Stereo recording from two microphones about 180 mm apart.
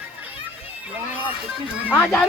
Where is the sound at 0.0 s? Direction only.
10° right (ahead or behind).